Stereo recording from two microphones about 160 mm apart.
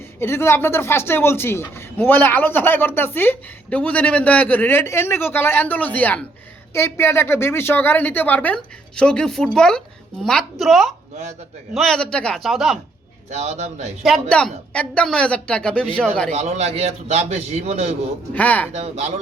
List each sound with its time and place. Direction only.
0.2 s a man's voice: 15° left (ahead or behind); by 12.8 s centre (ahead or behind)
13.3 s a man's voice: 45° right (ahead or behind)
14.0 s speech: 5° left (ahead or behind)
16.3 s a man's voice: 45° right (ahead or behind)
18.3 s speech: 10° left (ahead or behind)
18.7 s speech: 40° right (ahead or behind)